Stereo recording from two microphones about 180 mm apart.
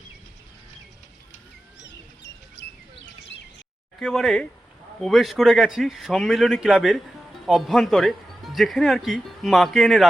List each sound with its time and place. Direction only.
1.9 s bird: 80° left
4.0 s speech: centre (ahead or behind)